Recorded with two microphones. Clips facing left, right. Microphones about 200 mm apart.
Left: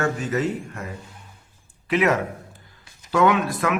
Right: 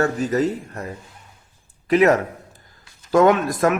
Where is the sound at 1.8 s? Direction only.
40° right (ahead or behind).